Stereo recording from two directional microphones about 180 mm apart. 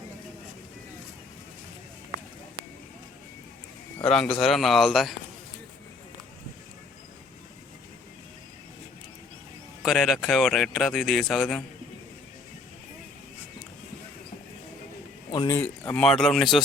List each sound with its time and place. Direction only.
3.9 s speech: 5° left (ahead or behind)
9.8 s speech: centre (ahead or behind)
15.3 s speech: 20° left (ahead or behind)
15.6 s speech: 10° left (ahead or behind)